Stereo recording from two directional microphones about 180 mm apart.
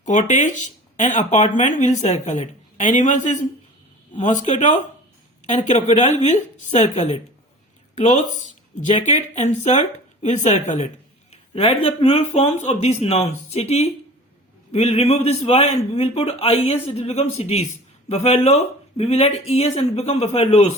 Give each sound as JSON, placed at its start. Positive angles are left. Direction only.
{"t": 0.0, "sound": "speech", "side_deg": 45}
{"t": 8.9, "sound": "speech", "side_deg": 35}